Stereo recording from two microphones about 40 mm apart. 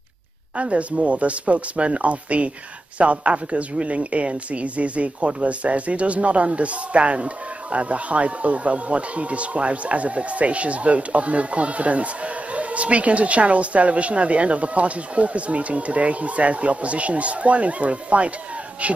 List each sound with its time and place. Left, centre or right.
0.6 s speech: right